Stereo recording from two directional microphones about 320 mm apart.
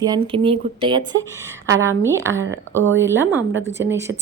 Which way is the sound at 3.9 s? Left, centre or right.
Centre.